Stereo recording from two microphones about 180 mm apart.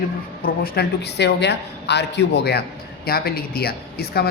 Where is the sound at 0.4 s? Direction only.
55° left (ahead or behind).